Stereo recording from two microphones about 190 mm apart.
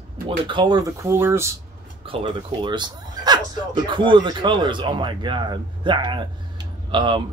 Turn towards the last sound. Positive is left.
turn(degrees=-25)  # may be behind; listen again after turning